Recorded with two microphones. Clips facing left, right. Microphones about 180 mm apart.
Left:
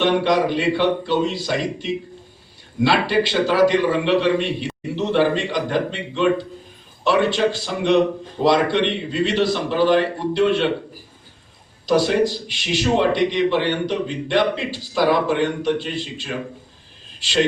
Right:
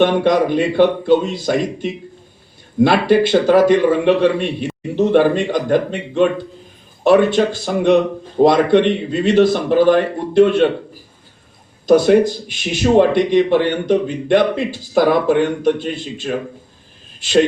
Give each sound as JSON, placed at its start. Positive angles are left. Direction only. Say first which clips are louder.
{"t": 0.0, "sound": "speech", "louder": "right 4 dB", "side_deg": -50}
{"t": 11.9, "sound": "speech", "louder": "right 6 dB", "side_deg": -50}